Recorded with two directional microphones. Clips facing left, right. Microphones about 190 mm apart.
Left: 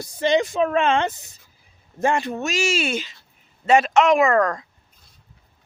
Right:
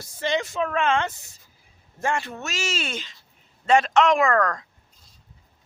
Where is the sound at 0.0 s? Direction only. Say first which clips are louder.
Left 6 dB; 15° left (ahead or behind).